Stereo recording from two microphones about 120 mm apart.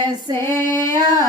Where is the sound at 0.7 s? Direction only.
20° left (ahead or behind).